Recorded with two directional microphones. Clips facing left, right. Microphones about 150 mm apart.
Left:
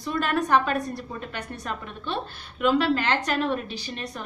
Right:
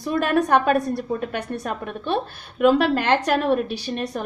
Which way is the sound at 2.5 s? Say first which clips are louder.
Right 5 dB; 5° right (ahead or behind).